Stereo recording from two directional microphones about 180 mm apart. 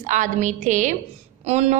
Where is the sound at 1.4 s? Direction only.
35° right (ahead or behind).